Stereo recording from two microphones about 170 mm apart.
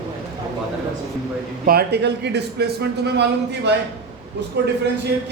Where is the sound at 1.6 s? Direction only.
70° right (ahead or behind); by 3.8 s 85° right.